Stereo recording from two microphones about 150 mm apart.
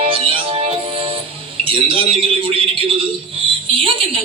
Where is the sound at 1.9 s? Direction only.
40° right (ahead or behind).